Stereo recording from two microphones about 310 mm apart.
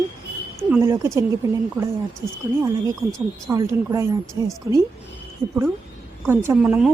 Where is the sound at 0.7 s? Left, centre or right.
Centre.